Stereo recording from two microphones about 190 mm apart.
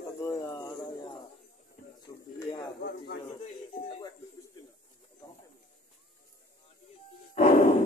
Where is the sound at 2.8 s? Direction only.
60° left (ahead or behind).